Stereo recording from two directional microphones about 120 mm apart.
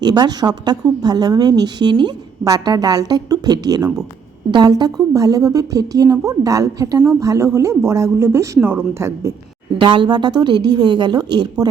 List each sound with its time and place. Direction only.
0.0 s a woman's voice: 35° right (ahead or behind)
9.7 s a woman's voice: 45° right (ahead or behind)